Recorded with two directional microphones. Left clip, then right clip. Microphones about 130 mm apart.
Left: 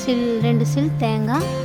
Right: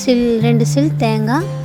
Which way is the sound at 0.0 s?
40° right (ahead or behind).